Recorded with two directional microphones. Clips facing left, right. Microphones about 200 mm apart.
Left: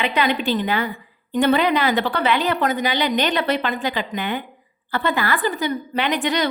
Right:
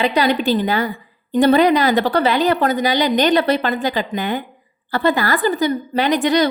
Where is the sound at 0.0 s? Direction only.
35° right (ahead or behind).